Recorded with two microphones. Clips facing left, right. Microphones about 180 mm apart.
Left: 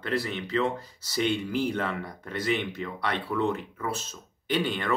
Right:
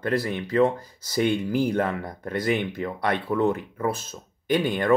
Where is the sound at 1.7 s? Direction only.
45° right (ahead or behind).